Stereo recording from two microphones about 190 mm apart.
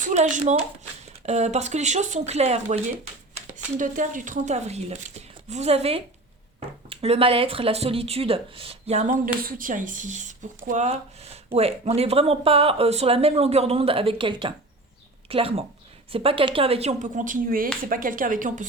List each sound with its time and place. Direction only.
0.0 s speech: 40° right (ahead or behind)